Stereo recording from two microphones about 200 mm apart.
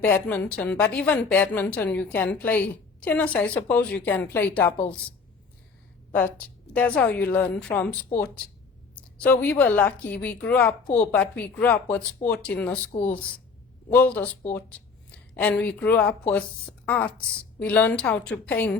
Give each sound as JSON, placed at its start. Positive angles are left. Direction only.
{"t": 0.0, "sound": "a woman's voice", "side_deg": 5}
{"t": 6.1, "sound": "a woman's voice", "side_deg": 10}
{"t": 12.9, "sound": "speech", "side_deg": 30}
{"t": 13.9, "sound": "a woman's voice", "side_deg": 10}
{"t": 15.4, "sound": "a woman's voice", "side_deg": 5}